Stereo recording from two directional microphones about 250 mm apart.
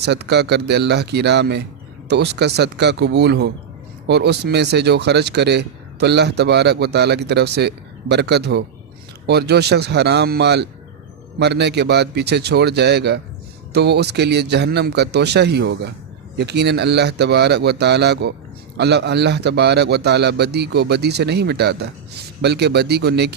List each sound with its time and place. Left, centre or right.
0.0 s a man's voice: right